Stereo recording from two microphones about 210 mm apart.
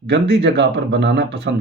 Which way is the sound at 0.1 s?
55° right (ahead or behind).